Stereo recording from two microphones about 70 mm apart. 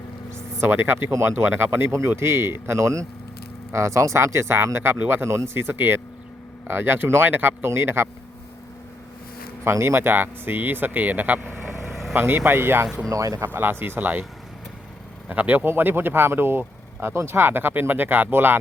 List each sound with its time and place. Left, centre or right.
0.3 s speech: right
9.6 s speech: right
11.9 s vehicle: centre
12.1 s speech: right
13.1 s speech: right
13.5 s speech: right
15.3 s speech: right